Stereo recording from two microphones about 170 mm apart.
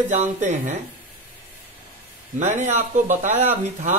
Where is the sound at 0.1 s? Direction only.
45° right (ahead or behind).